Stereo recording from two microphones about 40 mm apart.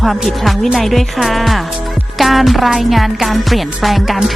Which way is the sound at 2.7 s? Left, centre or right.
Centre.